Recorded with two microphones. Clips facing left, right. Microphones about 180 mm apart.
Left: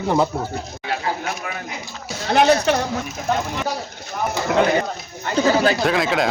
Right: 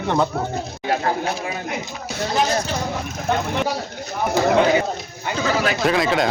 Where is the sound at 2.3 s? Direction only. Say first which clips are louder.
Left 7 dB; 65° left (ahead or behind).